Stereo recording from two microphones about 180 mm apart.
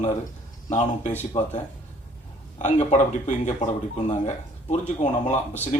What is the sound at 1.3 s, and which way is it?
Speech, 30° left (ahead or behind).